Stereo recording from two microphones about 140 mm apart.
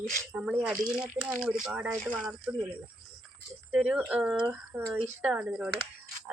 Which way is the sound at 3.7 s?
5° right (ahead or behind).